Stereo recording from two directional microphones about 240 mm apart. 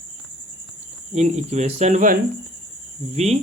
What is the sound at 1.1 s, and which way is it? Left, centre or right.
Speech, right.